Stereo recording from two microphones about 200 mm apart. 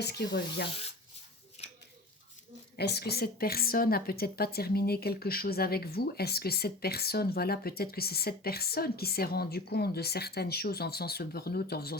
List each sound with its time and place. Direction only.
0.0 s speech: 55° left (ahead or behind)
1.6 s a sound: 35° left (ahead or behind)
2.7 s a woman's voice: 55° left (ahead or behind)